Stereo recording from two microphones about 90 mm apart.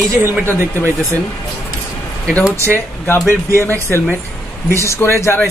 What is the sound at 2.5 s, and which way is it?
Speech, 30° right (ahead or behind).